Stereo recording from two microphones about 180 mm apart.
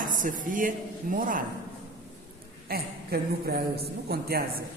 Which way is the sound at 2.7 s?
60° right (ahead or behind).